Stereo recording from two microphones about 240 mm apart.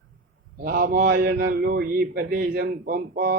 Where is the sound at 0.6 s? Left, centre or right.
Right.